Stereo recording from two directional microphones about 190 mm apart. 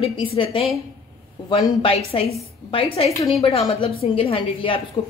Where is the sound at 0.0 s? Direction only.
30° left (ahead or behind).